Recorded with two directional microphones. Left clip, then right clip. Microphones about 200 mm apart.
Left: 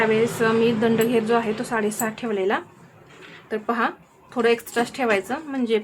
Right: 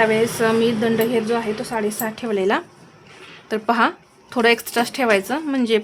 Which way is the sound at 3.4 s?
40° right (ahead or behind).